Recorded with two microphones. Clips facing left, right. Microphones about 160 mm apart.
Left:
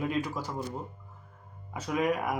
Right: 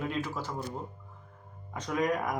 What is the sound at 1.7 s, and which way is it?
Speech, 5° left (ahead or behind).